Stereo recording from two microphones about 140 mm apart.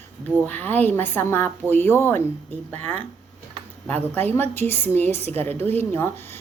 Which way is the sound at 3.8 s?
10° left (ahead or behind).